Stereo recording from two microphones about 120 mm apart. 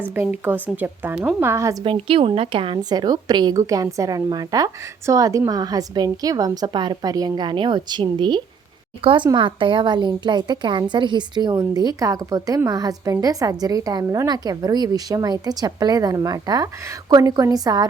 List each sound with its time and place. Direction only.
0.0 s a woman's voice: 15° right (ahead or behind)
1.8 s speech: 50° right (ahead or behind); by 17.8 s 35° right (ahead or behind)